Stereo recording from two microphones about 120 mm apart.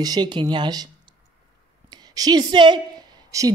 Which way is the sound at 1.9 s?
35° right (ahead or behind).